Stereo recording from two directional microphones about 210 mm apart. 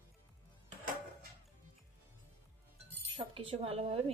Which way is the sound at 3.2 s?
25° right (ahead or behind).